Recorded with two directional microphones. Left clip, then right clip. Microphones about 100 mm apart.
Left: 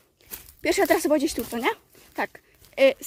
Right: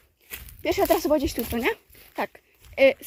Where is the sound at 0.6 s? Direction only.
65° left (ahead or behind); by 1.4 s 45° left (ahead or behind).